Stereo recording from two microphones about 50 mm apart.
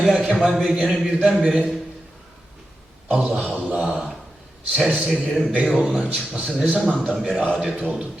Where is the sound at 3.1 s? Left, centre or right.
Right.